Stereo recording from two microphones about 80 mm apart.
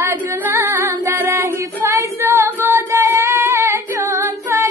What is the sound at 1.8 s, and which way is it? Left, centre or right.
Singing, right.